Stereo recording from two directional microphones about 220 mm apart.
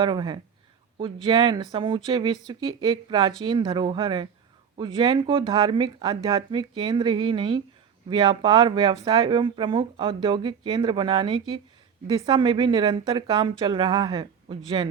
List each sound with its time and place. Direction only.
0.0 s speech: 20° right (ahead or behind)